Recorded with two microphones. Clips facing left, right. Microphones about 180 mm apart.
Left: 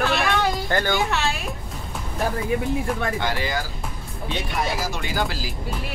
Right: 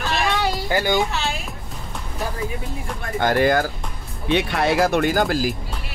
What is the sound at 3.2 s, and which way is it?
Speech, 50° right (ahead or behind).